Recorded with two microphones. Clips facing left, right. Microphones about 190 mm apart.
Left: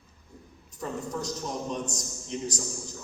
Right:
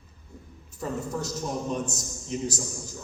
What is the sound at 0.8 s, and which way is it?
A man's voice, 5° right (ahead or behind).